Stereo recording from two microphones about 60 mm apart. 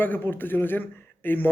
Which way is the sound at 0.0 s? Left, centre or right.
Left.